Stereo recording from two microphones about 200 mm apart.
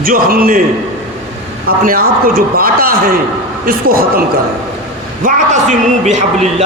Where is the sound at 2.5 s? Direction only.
45° right (ahead or behind).